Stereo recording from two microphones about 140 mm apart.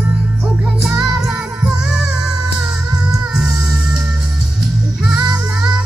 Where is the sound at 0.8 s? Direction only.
5° right (ahead or behind).